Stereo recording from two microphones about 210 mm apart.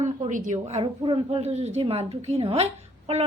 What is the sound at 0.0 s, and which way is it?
A woman's voice, 35° right (ahead or behind).